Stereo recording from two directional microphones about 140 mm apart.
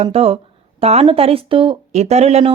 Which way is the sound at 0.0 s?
45° right (ahead or behind).